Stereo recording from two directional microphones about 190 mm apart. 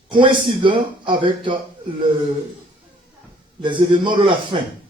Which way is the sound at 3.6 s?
25° right (ahead or behind).